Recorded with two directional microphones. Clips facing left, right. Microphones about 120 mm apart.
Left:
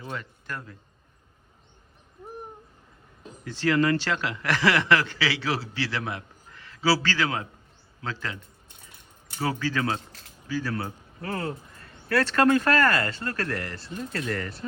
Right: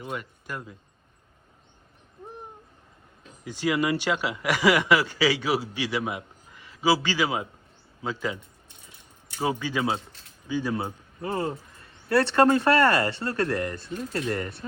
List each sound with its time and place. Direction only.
0.2 s speech: 10° right (ahead or behind)
3.4 s speech: 10° right (ahead or behind)
9.4 s speech: 15° right (ahead or behind)